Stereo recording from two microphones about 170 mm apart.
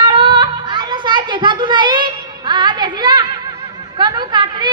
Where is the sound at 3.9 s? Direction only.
25° right (ahead or behind).